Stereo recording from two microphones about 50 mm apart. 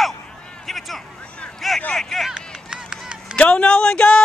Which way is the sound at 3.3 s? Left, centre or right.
Left.